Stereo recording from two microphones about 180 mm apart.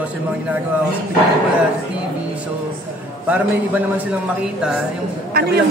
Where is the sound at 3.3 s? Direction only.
10° right (ahead or behind).